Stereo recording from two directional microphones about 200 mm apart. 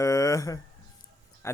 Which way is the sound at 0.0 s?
15° left (ahead or behind).